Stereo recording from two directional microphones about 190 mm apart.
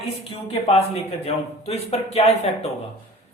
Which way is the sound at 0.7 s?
35° left (ahead or behind).